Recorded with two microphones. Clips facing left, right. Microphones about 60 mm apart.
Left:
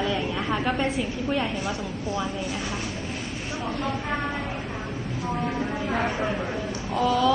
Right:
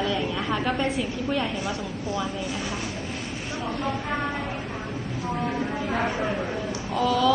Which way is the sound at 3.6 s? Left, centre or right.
Centre.